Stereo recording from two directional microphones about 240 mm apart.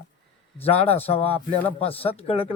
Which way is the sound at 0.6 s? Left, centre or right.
Left.